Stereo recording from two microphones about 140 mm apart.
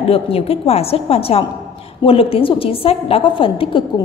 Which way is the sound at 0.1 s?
45° left (ahead or behind).